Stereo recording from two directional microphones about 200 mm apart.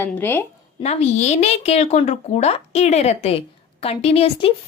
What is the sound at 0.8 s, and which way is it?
A woman's voice, 30° left (ahead or behind).